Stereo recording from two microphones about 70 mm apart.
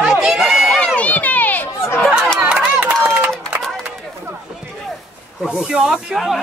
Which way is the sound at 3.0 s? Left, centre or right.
Right.